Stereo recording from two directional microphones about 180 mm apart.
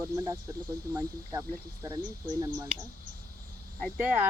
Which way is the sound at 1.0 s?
15° right (ahead or behind).